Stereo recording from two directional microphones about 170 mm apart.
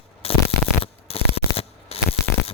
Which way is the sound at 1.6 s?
35° left (ahead or behind).